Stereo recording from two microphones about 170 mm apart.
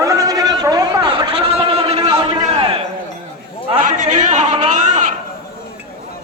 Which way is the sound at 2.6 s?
35° right (ahead or behind).